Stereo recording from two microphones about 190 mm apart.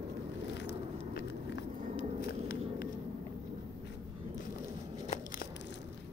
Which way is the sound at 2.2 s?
55° left (ahead or behind).